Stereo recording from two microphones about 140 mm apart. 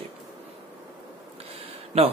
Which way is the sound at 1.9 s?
45° right (ahead or behind).